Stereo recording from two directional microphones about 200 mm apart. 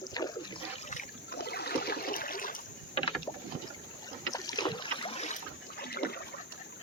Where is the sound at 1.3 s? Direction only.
55° left (ahead or behind).